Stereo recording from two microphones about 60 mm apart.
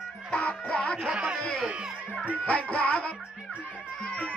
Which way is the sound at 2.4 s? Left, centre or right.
Left.